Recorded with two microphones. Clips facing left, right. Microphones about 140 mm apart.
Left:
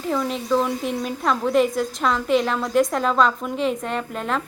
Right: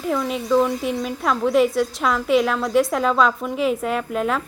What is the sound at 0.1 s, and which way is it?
A woman's voice, 5° right (ahead or behind).